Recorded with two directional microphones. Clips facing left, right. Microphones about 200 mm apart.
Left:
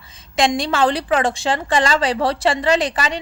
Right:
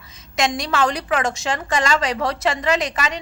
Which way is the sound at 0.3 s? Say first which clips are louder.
Left 3 dB; 30° left (ahead or behind).